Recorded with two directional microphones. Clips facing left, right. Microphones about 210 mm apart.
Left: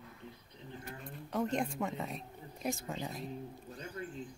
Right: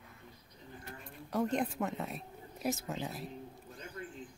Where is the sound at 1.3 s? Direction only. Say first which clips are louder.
Right 1 dB; centre (ahead or behind).